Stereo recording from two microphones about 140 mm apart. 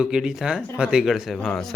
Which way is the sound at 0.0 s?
5° right (ahead or behind).